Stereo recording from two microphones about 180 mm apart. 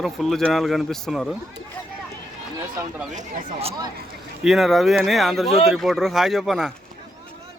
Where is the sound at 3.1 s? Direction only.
40° right (ahead or behind).